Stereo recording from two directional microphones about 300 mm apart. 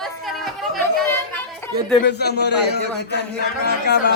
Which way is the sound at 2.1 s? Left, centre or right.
Left.